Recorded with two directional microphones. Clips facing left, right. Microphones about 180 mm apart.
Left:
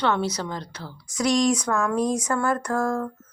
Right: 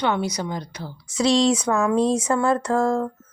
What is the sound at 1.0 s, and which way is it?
Speech, 25° right (ahead or behind).